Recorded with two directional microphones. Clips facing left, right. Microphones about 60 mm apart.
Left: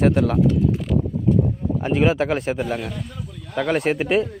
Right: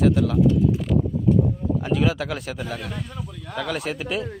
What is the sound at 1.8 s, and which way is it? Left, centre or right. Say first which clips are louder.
A man's voice: left 5 dB; left.